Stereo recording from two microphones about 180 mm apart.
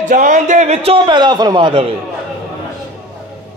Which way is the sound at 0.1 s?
45° right (ahead or behind).